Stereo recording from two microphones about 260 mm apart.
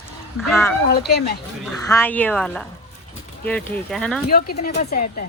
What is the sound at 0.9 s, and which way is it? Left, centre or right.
Speech, left.